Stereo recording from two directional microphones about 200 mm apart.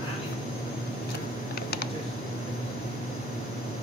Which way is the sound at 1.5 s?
50° left (ahead or behind).